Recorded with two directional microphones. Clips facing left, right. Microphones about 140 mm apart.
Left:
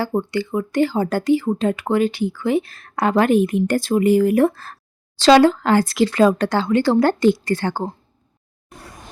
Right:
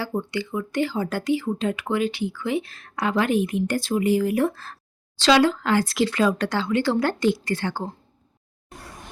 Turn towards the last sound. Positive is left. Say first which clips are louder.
# left 5 dB
turn(degrees=45)  # may be behind; listen again after turning